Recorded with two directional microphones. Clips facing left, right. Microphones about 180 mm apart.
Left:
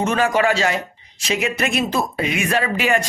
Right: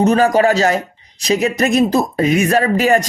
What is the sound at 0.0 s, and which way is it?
A man's voice, 40° right (ahead or behind).